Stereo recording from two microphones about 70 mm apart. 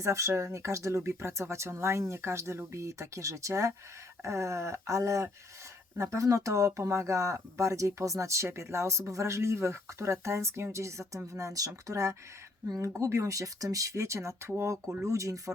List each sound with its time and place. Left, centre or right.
0.0 s speech: right